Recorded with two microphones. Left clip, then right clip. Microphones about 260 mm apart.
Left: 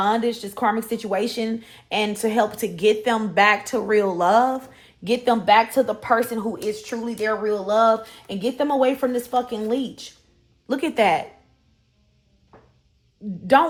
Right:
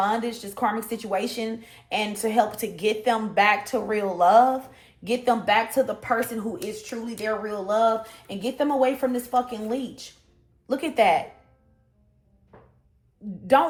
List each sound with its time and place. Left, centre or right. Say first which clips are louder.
0.0 s speech: left 4 dB; left